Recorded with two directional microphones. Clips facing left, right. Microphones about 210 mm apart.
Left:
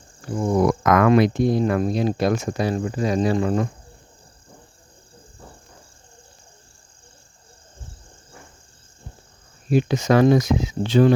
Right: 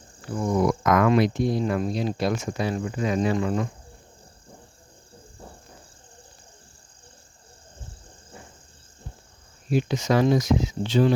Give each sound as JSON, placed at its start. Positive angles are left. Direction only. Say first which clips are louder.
{"t": 0.3, "sound": "speech", "louder": "left 3 dB", "side_deg": 30}
{"t": 0.6, "sound": "speech", "louder": "left 3 dB", "side_deg": 65}
{"t": 2.4, "sound": "speech", "louder": "left 4 dB", "side_deg": 40}
{"t": 9.7, "sound": "speech", "louder": "left 4 dB", "side_deg": 55}